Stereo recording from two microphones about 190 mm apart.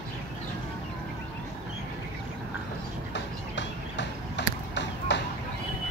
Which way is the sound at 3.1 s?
70° left (ahead or behind).